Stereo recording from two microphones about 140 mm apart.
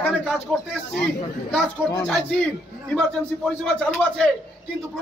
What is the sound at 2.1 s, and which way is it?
A man's voice, 5° left (ahead or behind).